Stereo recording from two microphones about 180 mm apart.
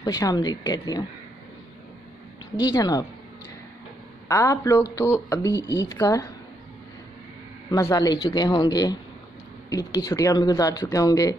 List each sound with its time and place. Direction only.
0.0 s speech: 20° left (ahead or behind)
2.6 s speech: 20° left (ahead or behind)
4.3 s speech: 15° left (ahead or behind)
7.7 s speech: 20° left (ahead or behind)